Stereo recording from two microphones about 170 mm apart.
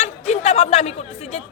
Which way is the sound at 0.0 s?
40° left (ahead or behind).